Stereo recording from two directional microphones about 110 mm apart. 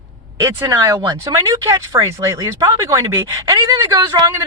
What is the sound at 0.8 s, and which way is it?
Speech, 35° right (ahead or behind).